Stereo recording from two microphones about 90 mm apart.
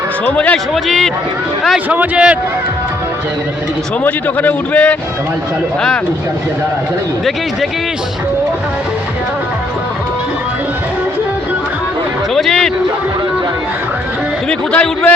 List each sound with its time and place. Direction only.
0.3 s a man's voice: 15° left (ahead or behind)
0.7 s speech: centre (ahead or behind)
1.9 s a man's voice: 15° right (ahead or behind)
4.0 s a man's voice: 20° left (ahead or behind)
12.3 s a sound: 5° left (ahead or behind)
14.7 s a man's voice: 15° left (ahead or behind)